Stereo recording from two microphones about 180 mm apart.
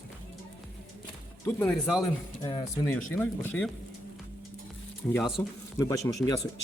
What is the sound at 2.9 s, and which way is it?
Speech, 10° left (ahead or behind).